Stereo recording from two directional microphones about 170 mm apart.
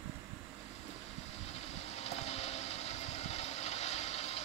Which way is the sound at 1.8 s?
40° left (ahead or behind).